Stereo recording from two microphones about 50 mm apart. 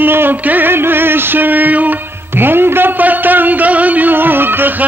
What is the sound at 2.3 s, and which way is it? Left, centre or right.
Music, right.